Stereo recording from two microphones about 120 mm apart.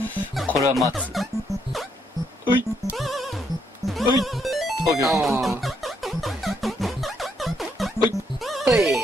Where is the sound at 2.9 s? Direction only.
Centre (ahead or behind).